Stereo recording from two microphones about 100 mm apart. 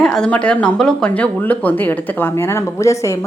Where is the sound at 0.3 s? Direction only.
15° left (ahead or behind).